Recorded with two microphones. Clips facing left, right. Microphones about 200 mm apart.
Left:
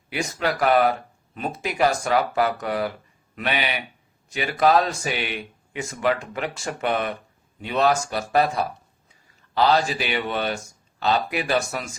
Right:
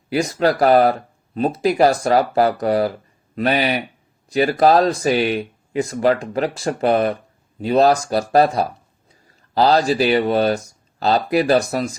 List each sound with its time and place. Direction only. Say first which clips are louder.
0.1 s speech: right 8 dB; 35° right (ahead or behind)